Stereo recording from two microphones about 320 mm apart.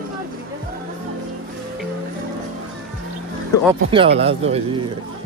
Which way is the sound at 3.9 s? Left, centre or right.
Centre.